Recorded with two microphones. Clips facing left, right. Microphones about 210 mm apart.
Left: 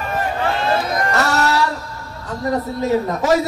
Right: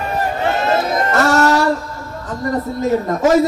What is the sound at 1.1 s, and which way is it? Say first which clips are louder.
Music: right 6 dB; 50° right (ahead or behind).